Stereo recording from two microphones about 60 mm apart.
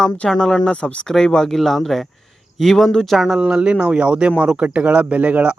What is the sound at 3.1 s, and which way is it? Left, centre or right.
Speech, centre.